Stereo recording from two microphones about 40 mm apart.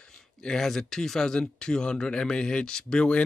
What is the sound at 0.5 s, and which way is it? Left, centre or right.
Speech, centre.